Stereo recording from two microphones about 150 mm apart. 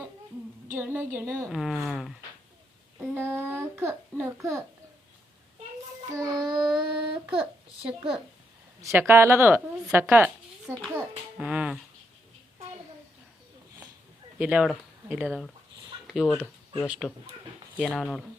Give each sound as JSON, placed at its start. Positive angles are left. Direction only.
{"t": 0.7, "sound": "a child's voice", "side_deg": -15}
{"t": 3.0, "sound": "a child's voice", "side_deg": -15}
{"t": 6.1, "sound": "child singing", "side_deg": -25}
{"t": 6.7, "sound": "a sound", "side_deg": -5}
{"t": 8.8, "sound": "a child's voice", "side_deg": -15}
{"t": 14.3, "sound": "speech", "side_deg": -10}